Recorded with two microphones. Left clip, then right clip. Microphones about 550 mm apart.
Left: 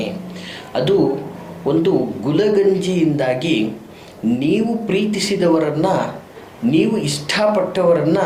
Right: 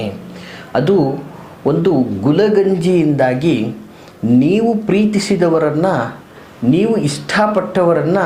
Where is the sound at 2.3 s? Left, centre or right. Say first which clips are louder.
Right 1 dB; right.